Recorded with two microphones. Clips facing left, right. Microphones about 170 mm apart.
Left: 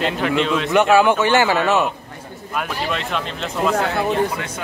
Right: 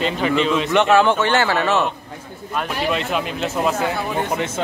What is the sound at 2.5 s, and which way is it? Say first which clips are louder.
Speech: right 2 dB; centre (ahead or behind).